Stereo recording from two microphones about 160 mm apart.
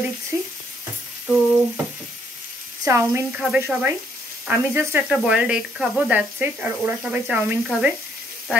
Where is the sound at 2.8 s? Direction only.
20° right (ahead or behind).